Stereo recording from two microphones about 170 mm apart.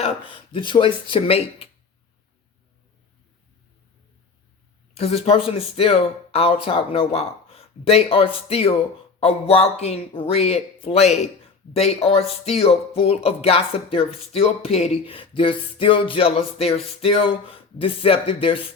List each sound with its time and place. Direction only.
0.5 s speech: 30° left (ahead or behind)
4.9 s speech: 35° left (ahead or behind)